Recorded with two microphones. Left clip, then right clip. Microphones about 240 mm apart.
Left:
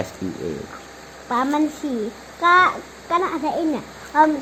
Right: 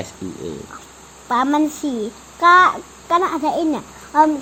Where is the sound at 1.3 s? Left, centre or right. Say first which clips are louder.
Right 3 dB; right.